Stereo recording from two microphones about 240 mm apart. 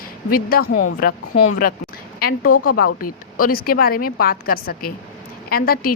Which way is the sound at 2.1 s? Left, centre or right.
Left.